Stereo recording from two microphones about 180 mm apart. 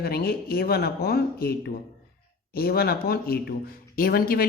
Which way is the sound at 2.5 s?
60° left (ahead or behind).